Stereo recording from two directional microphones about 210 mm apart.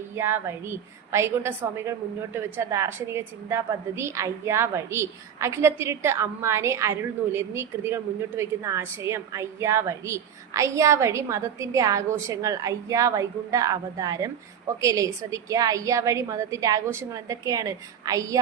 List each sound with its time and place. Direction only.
0.2 s a woman's voice: 10° right (ahead or behind)